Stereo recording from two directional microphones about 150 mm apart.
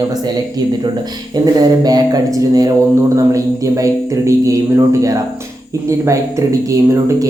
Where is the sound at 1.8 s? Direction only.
25° right (ahead or behind).